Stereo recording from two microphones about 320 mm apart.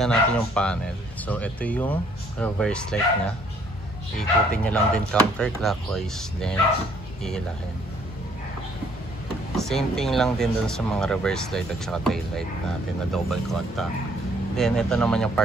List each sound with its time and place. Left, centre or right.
0.0 s speech: centre
9.6 s speech: centre